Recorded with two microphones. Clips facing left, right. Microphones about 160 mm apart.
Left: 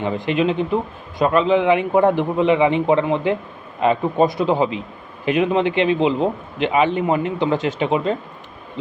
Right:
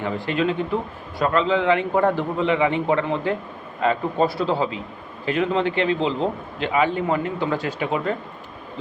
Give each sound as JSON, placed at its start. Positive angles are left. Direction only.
{"t": 0.0, "sound": "a man's voice", "side_deg": 20}